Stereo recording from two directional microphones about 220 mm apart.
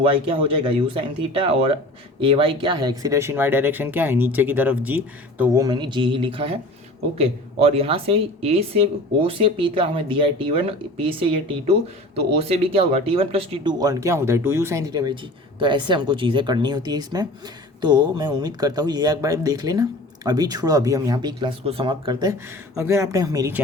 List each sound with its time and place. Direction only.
0.0 s speech: 25° right (ahead or behind); by 5.6 s 10° right (ahead or behind)
5.6 s speech: 20° right (ahead or behind)
12.7 s speech: 25° right (ahead or behind)